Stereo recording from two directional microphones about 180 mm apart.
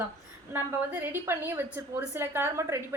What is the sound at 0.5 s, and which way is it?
A woman's voice, 10° right (ahead or behind).